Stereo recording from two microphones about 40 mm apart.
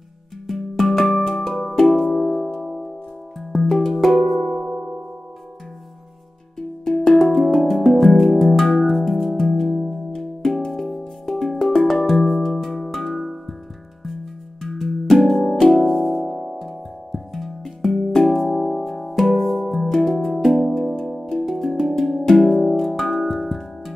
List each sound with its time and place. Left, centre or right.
0.5 s music: centre
4.6 s music: right
6.9 s music: centre
10.1 s music: centre
20.2 s music: centre
21.9 s music: centre